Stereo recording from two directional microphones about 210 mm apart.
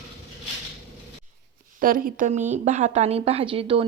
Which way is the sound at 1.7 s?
40° right (ahead or behind).